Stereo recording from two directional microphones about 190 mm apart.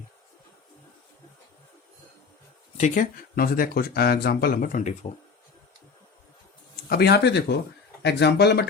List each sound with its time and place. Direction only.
2.7 s speech: 40° left (ahead or behind)
6.8 s speech: 55° left (ahead or behind)